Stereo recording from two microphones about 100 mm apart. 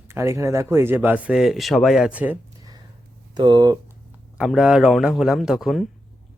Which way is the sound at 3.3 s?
45° right (ahead or behind).